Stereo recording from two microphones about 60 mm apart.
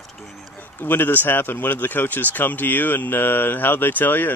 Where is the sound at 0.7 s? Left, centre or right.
Left.